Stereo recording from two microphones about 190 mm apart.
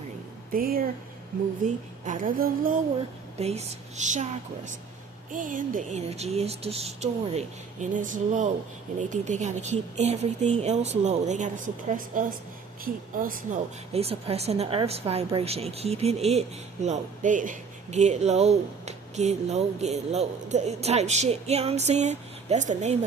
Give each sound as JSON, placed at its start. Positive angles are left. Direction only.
{"t": 0.5, "sound": "speech", "side_deg": -50}
{"t": 3.3, "sound": "speech", "side_deg": -35}
{"t": 13.9, "sound": "speech", "side_deg": -30}